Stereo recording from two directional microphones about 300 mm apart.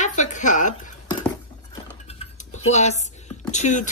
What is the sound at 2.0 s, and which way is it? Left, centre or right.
Dishes, left.